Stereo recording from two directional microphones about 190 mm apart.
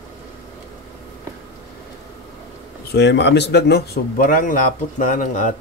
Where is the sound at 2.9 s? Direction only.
65° left (ahead or behind); by 5.5 s 40° left (ahead or behind).